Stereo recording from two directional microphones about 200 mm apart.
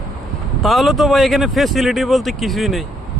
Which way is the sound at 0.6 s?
Centre (ahead or behind).